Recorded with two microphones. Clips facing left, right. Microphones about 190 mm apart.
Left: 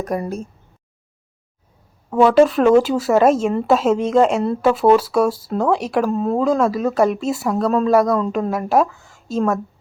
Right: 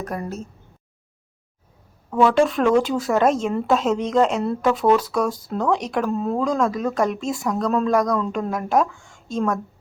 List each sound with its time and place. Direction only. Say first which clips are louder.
0.0 s speech: left 5 dB; 15° left (ahead or behind)
2.0 s a woman's voice: left 3 dB; 25° left (ahead or behind)
2.3 s a woman's voice: left 5 dB; 5° left (ahead or behind)